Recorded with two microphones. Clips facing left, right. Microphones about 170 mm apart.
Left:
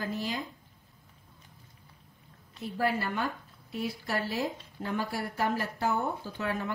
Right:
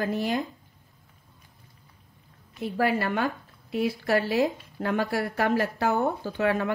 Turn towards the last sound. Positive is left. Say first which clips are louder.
# right 8 dB
turn(degrees=-75)  # may be behind; listen again after turning